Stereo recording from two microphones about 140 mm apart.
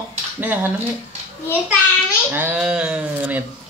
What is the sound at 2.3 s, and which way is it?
Speech, 15° right (ahead or behind).